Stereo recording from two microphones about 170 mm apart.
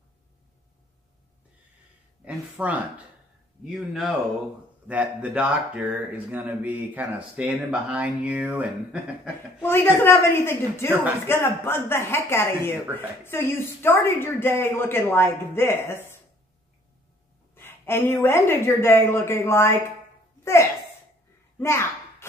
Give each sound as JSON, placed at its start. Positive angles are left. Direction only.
{"t": 2.2, "sound": "speech", "side_deg": -10}
{"t": 9.6, "sound": "speech", "side_deg": 15}
{"t": 17.6, "sound": "speech", "side_deg": 15}
{"t": 21.5, "sound": "speech", "side_deg": 15}